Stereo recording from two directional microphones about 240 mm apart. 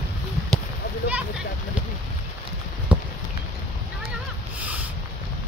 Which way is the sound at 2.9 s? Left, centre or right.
Centre.